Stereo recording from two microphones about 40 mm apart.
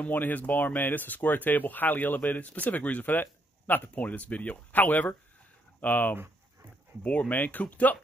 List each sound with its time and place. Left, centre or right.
0.0 s speech: left
4.8 s speech: left
7.0 s speech: left
7.3 s speech: left
7.7 s speech: left